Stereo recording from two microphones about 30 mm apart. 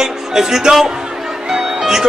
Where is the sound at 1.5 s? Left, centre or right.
Centre.